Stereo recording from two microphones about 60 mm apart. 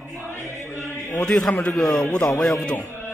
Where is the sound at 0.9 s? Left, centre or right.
Left.